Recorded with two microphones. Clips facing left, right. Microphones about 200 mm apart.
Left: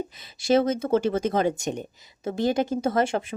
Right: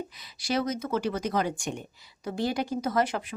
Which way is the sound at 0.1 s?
25° left (ahead or behind).